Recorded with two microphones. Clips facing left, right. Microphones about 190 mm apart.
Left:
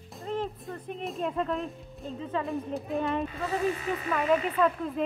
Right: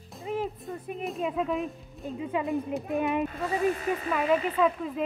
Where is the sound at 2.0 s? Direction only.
15° right (ahead or behind).